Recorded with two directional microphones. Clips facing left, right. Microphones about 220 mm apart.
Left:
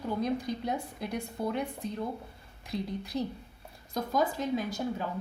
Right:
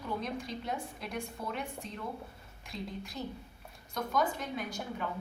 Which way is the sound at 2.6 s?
35° left (ahead or behind).